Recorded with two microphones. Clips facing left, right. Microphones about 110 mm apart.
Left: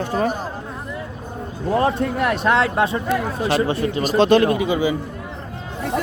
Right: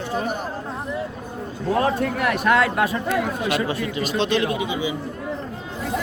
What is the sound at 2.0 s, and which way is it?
A man's voice, 25° left (ahead or behind).